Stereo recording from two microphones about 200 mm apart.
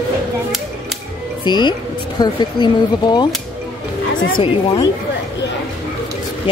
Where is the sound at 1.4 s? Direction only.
20° left (ahead or behind).